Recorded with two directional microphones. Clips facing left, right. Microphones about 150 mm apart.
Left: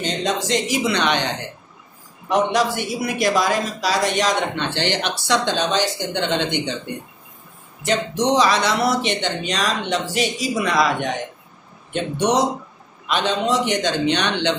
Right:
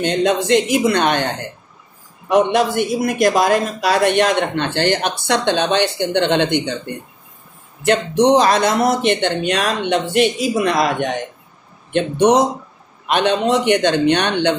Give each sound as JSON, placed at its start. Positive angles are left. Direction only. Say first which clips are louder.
{"t": 0.0, "sound": "a woman's voice", "louder": "right 6 dB", "side_deg": -60}
{"t": 7.8, "sound": "speech", "louder": "right 6 dB", "side_deg": -60}